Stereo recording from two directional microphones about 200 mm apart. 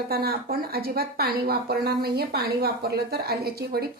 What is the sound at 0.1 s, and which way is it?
Speech, 50° right (ahead or behind).